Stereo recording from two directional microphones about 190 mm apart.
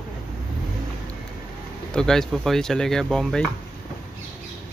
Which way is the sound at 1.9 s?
5° left (ahead or behind).